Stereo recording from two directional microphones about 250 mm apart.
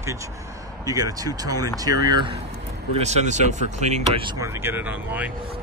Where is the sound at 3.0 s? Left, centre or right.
Right; by 5.3 s centre.